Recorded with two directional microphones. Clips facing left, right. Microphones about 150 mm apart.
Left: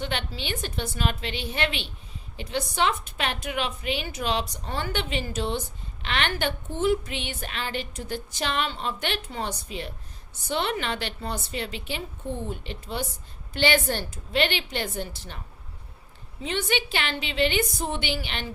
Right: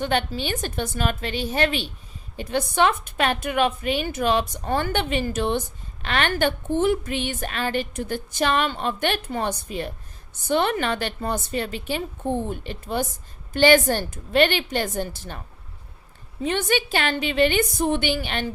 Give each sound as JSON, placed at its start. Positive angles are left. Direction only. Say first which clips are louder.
{"t": 0.0, "sound": "a woman's voice", "louder": "right 7 dB", "side_deg": -45}
{"t": 16.4, "sound": "a woman's voice", "louder": "right 5 dB", "side_deg": -50}